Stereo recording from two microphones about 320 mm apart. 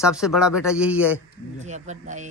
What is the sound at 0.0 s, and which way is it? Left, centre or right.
Speech, centre.